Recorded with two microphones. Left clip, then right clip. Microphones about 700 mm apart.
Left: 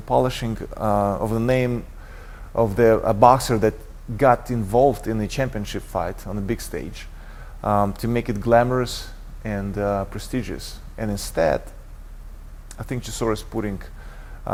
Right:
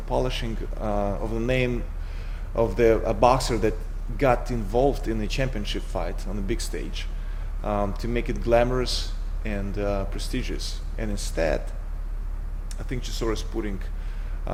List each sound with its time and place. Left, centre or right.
0.1 s speech: left
12.9 s speech: left